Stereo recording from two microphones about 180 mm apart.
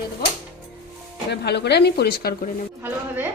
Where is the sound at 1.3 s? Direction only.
70° left (ahead or behind).